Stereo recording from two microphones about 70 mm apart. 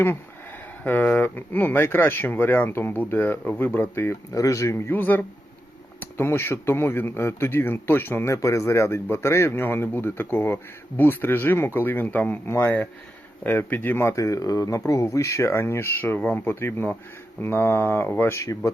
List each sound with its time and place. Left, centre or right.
0.9 s a man's voice: left
4.3 s speech: left
4.9 s a man's voice: left
8.4 s a man's voice: left
12.5 s a man's voice: left
14.1 s speech: left
16.6 s a man's voice: left